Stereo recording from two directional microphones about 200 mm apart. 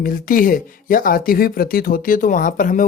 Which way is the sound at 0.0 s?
45° left (ahead or behind).